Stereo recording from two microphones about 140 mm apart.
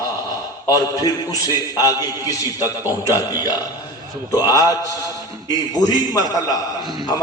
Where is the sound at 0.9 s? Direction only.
25° left (ahead or behind).